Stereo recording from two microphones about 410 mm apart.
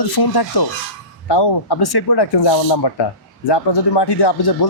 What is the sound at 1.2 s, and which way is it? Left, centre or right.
Speech, left.